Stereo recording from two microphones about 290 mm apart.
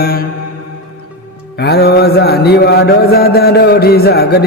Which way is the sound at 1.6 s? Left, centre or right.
Left.